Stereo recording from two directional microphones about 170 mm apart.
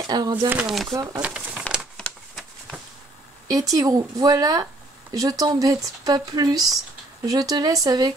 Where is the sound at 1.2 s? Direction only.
5° right (ahead or behind).